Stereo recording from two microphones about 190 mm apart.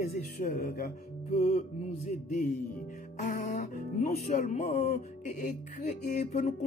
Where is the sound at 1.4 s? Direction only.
45° left (ahead or behind).